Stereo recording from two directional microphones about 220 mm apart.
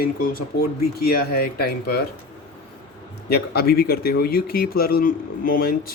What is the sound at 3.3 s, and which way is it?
A man's voice, 45° left (ahead or behind).